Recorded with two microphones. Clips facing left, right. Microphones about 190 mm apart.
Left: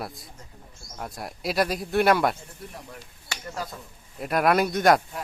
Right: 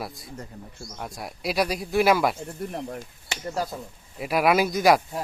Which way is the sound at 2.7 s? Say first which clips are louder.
Right 9 dB; 50° right (ahead or behind).